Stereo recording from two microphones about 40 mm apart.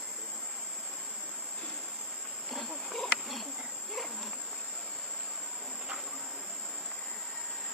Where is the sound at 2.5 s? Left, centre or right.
Centre.